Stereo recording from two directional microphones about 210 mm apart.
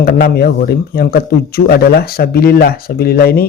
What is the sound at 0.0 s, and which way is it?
Speech, 45° left (ahead or behind).